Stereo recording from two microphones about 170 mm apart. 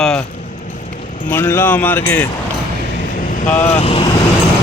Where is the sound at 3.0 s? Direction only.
55° left (ahead or behind).